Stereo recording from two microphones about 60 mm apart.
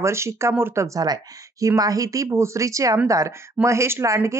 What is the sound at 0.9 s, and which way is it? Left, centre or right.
Speech, right.